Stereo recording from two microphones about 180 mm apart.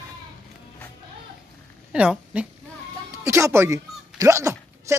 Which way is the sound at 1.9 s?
5° right (ahead or behind).